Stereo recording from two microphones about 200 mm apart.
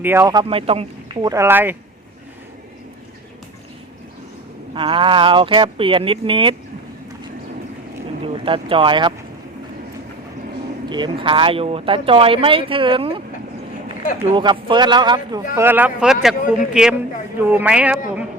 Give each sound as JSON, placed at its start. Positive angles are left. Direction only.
{"t": 0.0, "sound": "speech", "side_deg": -10}
{"t": 4.7, "sound": "speech", "side_deg": -25}
{"t": 8.2, "sound": "speech", "side_deg": -25}
{"t": 10.8, "sound": "speech", "side_deg": -20}
{"t": 14.3, "sound": "speech", "side_deg": -25}
{"t": 15.5, "sound": "speech", "side_deg": -10}